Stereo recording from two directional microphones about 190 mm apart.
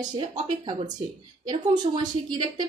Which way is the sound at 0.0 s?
20° right (ahead or behind).